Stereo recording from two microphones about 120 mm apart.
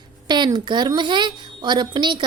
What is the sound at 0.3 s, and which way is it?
A woman's voice, 40° right (ahead or behind).